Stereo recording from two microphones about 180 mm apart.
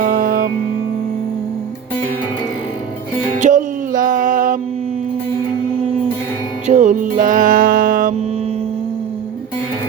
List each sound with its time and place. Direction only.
0.0 s music: 55° right (ahead or behind)
3.3 s music: 45° right (ahead or behind)
6.7 s music: 40° right (ahead or behind)